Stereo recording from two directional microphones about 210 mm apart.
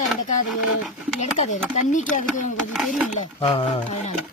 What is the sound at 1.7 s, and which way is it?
Speech, 35° left (ahead or behind).